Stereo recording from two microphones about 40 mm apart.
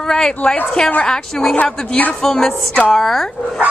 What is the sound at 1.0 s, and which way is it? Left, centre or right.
Speech, centre.